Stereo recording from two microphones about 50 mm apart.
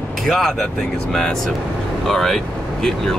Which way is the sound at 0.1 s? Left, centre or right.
Centre.